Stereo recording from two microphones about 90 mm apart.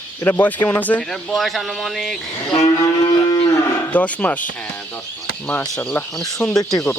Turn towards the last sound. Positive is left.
turn(degrees=45)  # may be behind; listen again after turning